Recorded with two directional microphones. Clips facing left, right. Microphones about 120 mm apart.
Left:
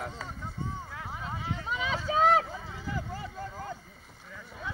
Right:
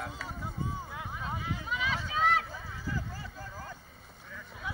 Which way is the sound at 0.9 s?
15° right (ahead or behind).